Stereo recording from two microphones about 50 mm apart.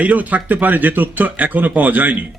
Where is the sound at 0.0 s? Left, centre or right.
Right.